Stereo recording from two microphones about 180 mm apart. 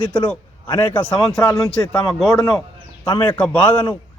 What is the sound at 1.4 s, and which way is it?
Speech, 15° left (ahead or behind).